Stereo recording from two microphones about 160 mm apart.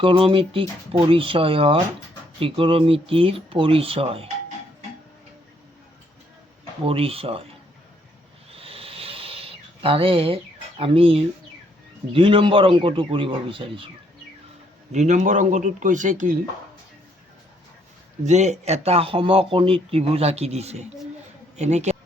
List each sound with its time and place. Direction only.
0.0 s speech: 35° right (ahead or behind)
6.8 s speech: 35° right (ahead or behind)
8.4 s a sound: 35° right (ahead or behind)
12.1 s speech: 30° right (ahead or behind)
14.9 s speech: 50° right (ahead or behind)
18.3 s speech: 45° right (ahead or behind)